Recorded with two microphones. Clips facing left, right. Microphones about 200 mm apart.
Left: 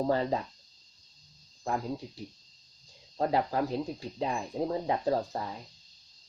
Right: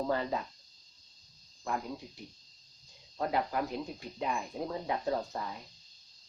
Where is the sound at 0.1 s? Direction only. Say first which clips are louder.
Left 4 dB; 35° left (ahead or behind).